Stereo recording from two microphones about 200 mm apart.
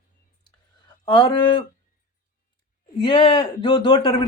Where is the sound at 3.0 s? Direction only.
25° left (ahead or behind).